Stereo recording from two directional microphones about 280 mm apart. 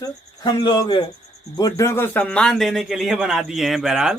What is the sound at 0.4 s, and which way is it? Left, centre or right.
A man's voice, centre.